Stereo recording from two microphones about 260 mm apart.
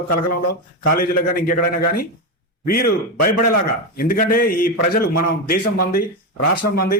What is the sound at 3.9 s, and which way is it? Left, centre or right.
Speech, left.